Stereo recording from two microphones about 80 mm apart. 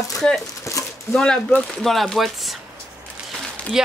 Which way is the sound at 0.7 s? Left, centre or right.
Left.